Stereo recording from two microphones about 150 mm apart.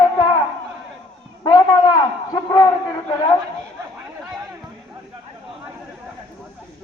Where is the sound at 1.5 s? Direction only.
25° left (ahead or behind).